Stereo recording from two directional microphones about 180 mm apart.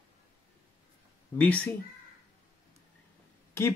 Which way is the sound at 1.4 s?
10° left (ahead or behind).